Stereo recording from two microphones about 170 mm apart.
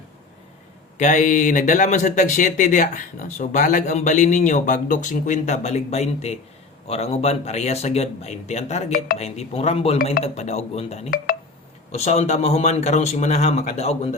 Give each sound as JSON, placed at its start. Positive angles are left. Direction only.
{"t": 0.9, "sound": "speech", "side_deg": 45}